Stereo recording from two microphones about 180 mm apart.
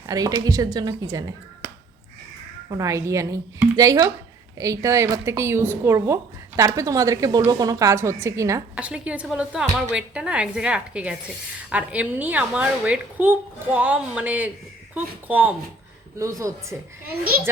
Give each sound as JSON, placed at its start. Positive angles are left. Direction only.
{"t": 0.1, "sound": "a woman's voice", "side_deg": -20}
{"t": 2.6, "sound": "a woman's voice", "side_deg": -20}